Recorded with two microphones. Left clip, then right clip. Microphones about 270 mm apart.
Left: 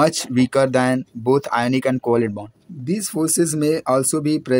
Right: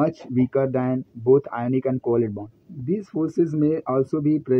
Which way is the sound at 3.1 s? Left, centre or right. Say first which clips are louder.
Left 3 dB; left.